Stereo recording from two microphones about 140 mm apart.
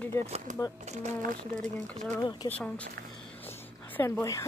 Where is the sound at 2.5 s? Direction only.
10° left (ahead or behind).